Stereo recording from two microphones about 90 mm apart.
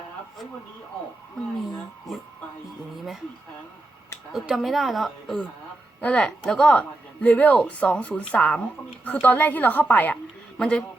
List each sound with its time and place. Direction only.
2.1 s a woman's voice: centre (ahead or behind)
4.3 s a woman's voice: 5° right (ahead or behind)
6.0 s a woman's voice: 15° left (ahead or behind)
10.6 s speech: 5° left (ahead or behind)